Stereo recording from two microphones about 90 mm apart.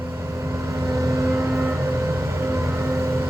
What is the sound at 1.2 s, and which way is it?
Vehicle, 30° right (ahead or behind).